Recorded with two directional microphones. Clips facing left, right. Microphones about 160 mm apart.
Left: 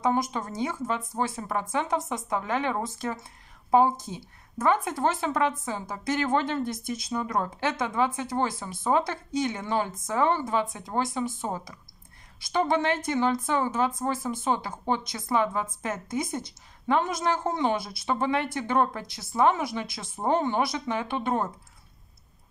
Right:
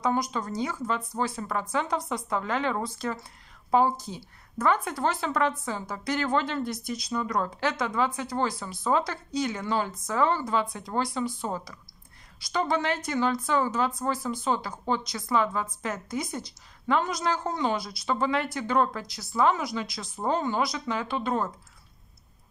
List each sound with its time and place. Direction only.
0.0 s speech: 20° left (ahead or behind)